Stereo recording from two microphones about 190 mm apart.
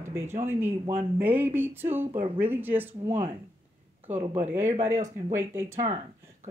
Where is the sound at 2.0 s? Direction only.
30° right (ahead or behind).